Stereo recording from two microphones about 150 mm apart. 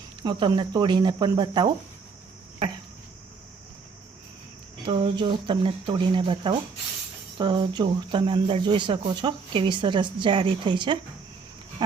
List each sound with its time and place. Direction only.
0.2 s speech: 30° right (ahead or behind)
4.9 s speech: 35° right (ahead or behind)